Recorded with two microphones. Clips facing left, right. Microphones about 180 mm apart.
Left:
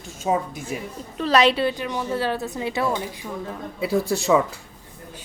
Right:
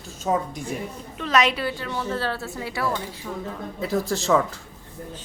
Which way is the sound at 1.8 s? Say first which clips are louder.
Left 2 dB; 15° left (ahead or behind).